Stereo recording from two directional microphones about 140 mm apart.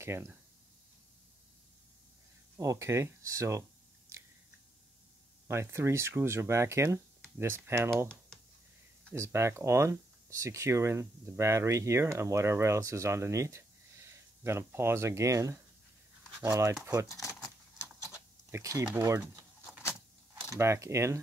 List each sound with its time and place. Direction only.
0.0 s speech: 20° right (ahead or behind)
2.5 s speech: 20° right (ahead or behind)
5.5 s speech: 20° right (ahead or behind)
9.1 s speech: 20° right (ahead or behind)
17.1 s a sound: 20° left (ahead or behind)
18.5 s speech: 25° right (ahead or behind)
20.5 s speech: 20° right (ahead or behind)